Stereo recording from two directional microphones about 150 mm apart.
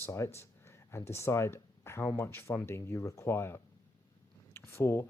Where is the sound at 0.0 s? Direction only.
20° left (ahead or behind).